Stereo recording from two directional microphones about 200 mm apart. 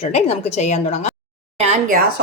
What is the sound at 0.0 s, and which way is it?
A woman's voice, 30° left (ahead or behind).